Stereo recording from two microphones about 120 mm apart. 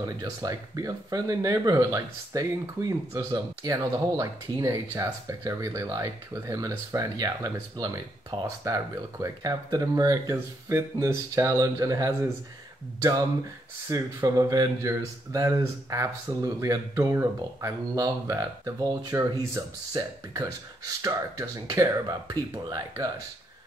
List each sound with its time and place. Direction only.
0.0 s speech: 30° right (ahead or behind)
13.8 s speech: 25° right (ahead or behind)